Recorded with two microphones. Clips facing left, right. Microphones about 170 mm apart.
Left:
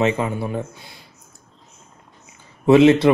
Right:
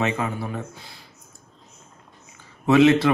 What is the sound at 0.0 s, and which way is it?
Speech, 25° left (ahead or behind).